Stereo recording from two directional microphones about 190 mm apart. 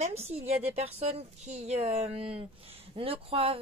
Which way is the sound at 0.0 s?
35° right (ahead or behind).